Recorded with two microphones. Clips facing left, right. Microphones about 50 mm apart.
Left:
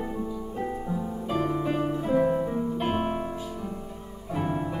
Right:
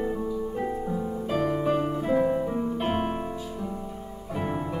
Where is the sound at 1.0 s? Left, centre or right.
Centre.